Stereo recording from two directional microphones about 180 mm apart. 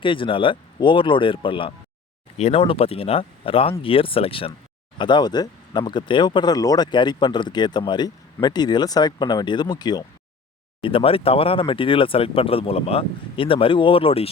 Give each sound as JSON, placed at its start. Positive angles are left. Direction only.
{"t": 0.0, "sound": "speech", "side_deg": 30}